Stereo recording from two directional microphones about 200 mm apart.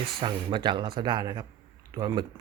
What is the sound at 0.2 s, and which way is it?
Speech, 25° right (ahead or behind).